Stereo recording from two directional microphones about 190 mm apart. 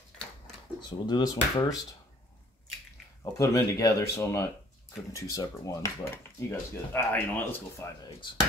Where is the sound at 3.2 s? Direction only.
15° left (ahead or behind).